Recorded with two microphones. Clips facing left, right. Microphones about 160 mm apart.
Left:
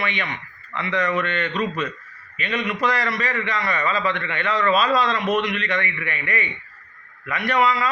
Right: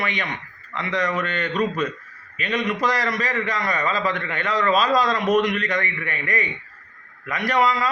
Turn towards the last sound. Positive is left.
turn(degrees=-40)  # may be behind; listen again after turning